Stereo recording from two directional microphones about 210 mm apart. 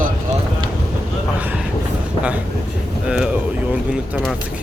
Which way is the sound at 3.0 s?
5° right (ahead or behind).